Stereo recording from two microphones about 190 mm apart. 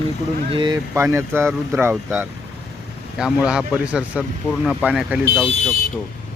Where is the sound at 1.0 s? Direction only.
10° right (ahead or behind).